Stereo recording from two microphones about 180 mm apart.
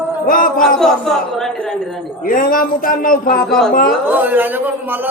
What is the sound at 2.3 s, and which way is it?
Speech, 50° left (ahead or behind).